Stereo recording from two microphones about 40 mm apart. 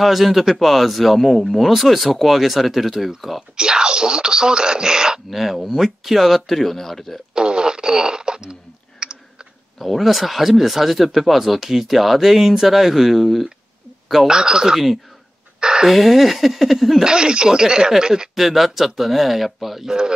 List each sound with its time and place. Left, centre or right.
0.0 s speech: centre
3.5 s speech: centre
5.3 s speech: centre
7.3 s fart: right
9.0 s chewing: centre
9.8 s speech: centre
14.3 s speech: centre
15.6 s a sound: centre
15.9 s speech: centre
17.0 s speech: right
18.3 s speech: centre
19.9 s speech: centre